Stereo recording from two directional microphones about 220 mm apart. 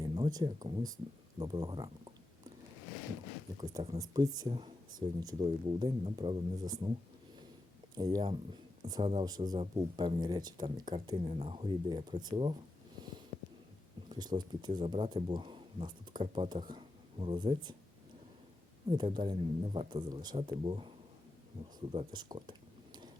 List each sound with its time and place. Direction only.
0.0 s a sound: 20° right (ahead or behind)
0.6 s speech: 20° right (ahead or behind)
3.6 s speech: 15° right (ahead or behind)
7.9 s speech: 15° right (ahead or behind)
14.1 s speech: 20° right (ahead or behind)
18.9 s speech: 20° right (ahead or behind)